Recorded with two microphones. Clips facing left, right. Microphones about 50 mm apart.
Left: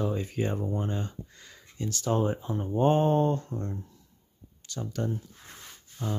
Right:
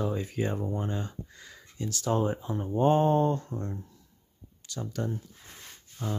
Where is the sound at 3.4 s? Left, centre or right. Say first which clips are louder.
Left 1 dB; centre.